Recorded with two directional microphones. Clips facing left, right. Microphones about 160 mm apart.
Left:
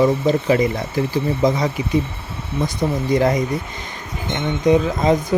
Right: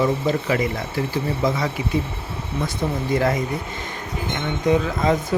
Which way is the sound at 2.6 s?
15° left (ahead or behind).